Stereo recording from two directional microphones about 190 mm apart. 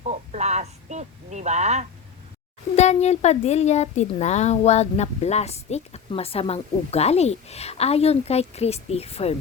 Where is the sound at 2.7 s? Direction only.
35° left (ahead or behind).